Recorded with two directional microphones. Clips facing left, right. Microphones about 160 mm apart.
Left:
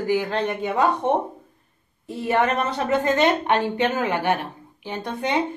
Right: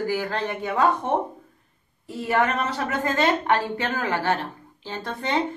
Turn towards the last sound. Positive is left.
turn(degrees=15)  # may be behind; listen again after turning